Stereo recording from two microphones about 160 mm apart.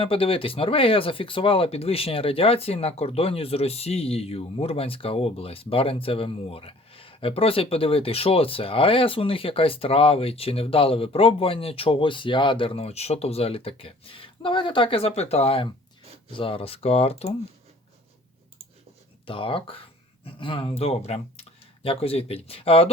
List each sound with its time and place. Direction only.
0.0 s speech: 35° left (ahead or behind)
19.2 s speech: 35° left (ahead or behind)